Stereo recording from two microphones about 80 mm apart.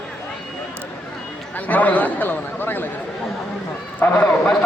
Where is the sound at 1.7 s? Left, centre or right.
Left.